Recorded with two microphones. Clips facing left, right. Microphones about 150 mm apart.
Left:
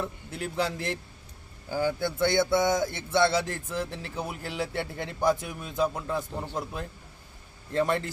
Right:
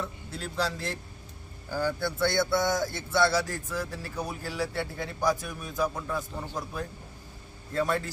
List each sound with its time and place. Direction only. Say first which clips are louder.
0.3 s speech: left 3 dB; 60° left (ahead or behind)
0.5 s speech: left 1 dB; 20° left (ahead or behind)